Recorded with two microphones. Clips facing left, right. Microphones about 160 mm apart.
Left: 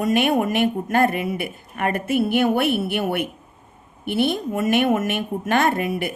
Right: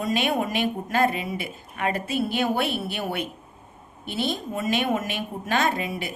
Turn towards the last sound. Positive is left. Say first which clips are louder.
# left 5 dB
turn(degrees=55)  # may be behind; listen again after turning